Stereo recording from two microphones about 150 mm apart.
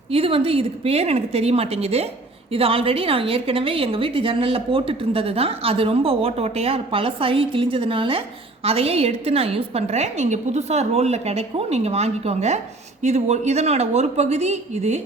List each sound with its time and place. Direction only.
0.1 s a woman's voice: 40° right (ahead or behind)